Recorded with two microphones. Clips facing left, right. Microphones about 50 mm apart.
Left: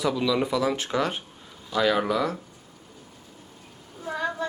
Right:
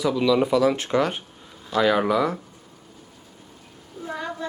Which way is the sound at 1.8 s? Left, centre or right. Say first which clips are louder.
Right 3 dB; centre.